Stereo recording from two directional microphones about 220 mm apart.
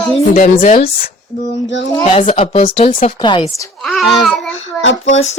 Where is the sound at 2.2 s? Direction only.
25° left (ahead or behind).